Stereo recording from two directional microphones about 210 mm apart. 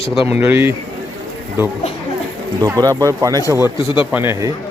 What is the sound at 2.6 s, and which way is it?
Speech, 15° right (ahead or behind).